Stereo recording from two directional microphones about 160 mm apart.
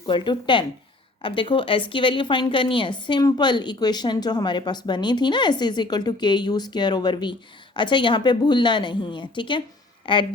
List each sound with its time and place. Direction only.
0.0 s a woman's voice: 30° left (ahead or behind)